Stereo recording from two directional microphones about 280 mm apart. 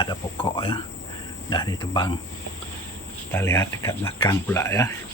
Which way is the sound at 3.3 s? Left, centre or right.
Centre.